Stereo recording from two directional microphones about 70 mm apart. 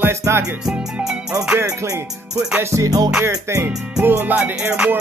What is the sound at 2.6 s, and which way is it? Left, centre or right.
Music, right.